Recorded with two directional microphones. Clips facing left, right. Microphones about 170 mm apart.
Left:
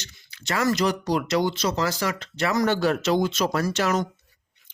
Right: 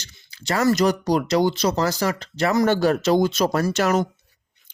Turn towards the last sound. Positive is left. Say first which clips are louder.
# right 3 dB
turn(degrees=-45)  # may be behind; listen again after turning